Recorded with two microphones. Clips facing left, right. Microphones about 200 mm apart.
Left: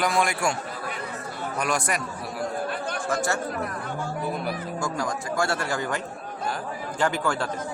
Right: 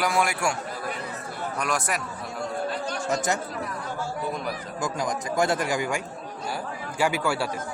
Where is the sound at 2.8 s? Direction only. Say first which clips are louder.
Even; 55° left (ahead or behind).